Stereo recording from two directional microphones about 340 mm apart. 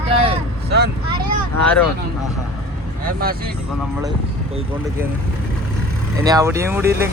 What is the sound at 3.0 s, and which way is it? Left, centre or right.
Speech, right.